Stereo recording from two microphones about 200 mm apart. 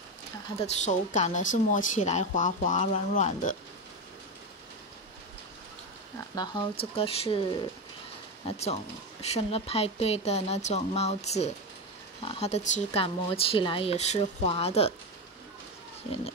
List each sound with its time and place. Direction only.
0.6 s a woman's voice: 35° left (ahead or behind)
6.3 s a woman's voice: 20° left (ahead or behind)